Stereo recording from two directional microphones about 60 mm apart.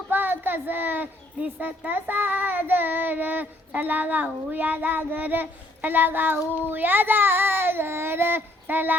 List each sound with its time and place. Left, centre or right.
0.1 s speech: right